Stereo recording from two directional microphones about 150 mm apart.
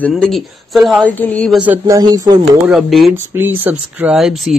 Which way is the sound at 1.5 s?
10° right (ahead or behind).